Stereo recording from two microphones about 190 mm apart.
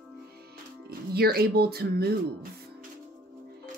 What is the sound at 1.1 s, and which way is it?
Speech, 55° right (ahead or behind).